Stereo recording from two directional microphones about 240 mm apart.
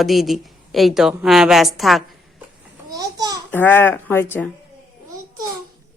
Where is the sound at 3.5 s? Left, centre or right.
Centre.